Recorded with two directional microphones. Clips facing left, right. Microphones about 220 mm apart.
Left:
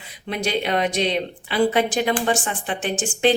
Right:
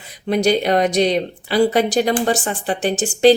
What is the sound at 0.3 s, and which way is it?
Speech, 40° right (ahead or behind).